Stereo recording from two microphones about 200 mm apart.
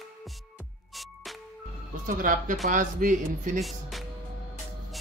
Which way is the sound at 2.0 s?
45° right (ahead or behind).